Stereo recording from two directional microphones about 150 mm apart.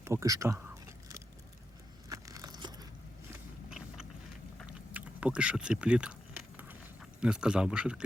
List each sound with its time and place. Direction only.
0.0 s a sound: 20° right (ahead or behind)
3.7 s vehicle: 5° right (ahead or behind)
4.9 s speech: 10° right (ahead or behind)
7.2 s speech: 5° right (ahead or behind)